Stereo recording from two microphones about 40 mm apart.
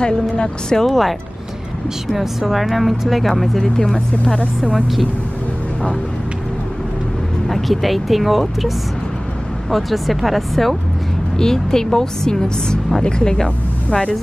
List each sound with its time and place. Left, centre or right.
0.0 s speech: centre
0.8 s a woman's voice: centre
3.6 s a woman's voice: centre
4.7 s a woman's voice: centre
7.4 s a woman's voice: centre
11.3 s a woman's voice: centre